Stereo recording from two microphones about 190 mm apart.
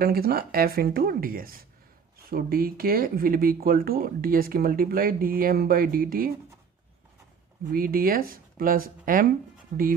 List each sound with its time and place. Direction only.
0.0 s speech: 55° right (ahead or behind)
7.7 s speech: 50° right (ahead or behind)